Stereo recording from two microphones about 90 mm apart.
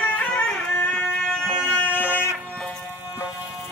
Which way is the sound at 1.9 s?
20° left (ahead or behind).